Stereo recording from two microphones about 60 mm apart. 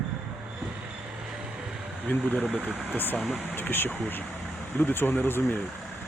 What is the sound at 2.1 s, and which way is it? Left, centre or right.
Speech, left.